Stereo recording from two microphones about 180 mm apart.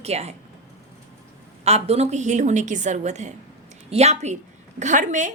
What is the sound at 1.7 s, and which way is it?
A woman's voice, 35° right (ahead or behind).